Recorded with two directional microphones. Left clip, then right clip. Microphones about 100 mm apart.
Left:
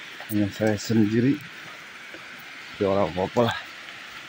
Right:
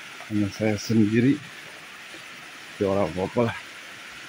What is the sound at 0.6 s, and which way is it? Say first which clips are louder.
Speech: left 2 dB; 30° right (ahead or behind).